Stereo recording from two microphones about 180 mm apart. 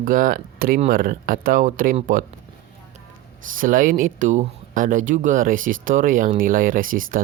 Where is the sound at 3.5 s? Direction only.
50° right (ahead or behind).